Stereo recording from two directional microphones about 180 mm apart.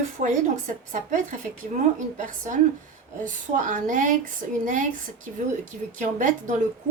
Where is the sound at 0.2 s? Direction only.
45° right (ahead or behind).